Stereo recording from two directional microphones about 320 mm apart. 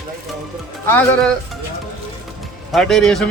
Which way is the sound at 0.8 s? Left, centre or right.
Centre.